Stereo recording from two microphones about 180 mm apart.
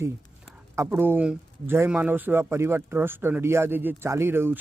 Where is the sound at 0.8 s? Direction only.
10° right (ahead or behind).